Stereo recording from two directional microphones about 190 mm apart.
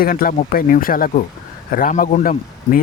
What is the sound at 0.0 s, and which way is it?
Speech, 50° left (ahead or behind).